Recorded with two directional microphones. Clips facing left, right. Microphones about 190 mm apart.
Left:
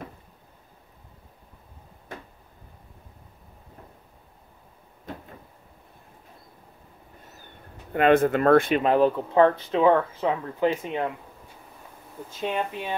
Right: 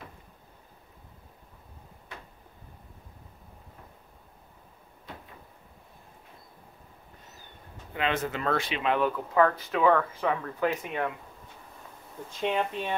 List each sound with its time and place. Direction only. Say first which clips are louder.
5.1 s cupboard open or close: left 7 dB; 50° left (ahead or behind)
7.9 s speech: left 11 dB; 50° left (ahead or behind); by 11.1 s 20° left (ahead or behind)
12.4 s speech: even; 5° left (ahead or behind)